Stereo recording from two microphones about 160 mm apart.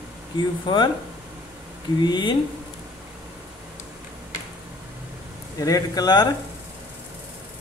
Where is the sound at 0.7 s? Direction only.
30° left (ahead or behind).